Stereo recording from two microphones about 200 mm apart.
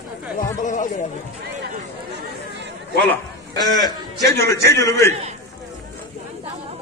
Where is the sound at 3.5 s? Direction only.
20° left (ahead or behind).